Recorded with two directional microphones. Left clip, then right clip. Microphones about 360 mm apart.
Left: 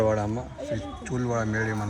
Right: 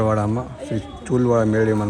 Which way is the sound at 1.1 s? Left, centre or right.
Right.